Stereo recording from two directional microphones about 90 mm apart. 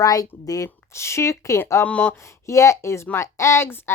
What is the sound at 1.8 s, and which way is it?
Speech, 15° left (ahead or behind).